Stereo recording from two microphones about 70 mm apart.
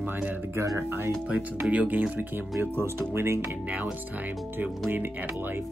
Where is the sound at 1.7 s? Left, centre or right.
Centre.